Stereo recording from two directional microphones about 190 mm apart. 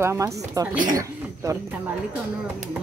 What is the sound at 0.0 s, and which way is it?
A woman's voice, 15° right (ahead or behind).